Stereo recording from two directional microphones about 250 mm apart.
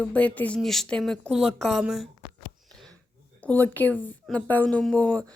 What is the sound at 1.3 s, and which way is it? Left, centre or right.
Speech, right.